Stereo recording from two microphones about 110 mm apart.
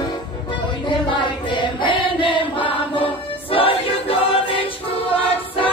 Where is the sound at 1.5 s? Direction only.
50° left (ahead or behind).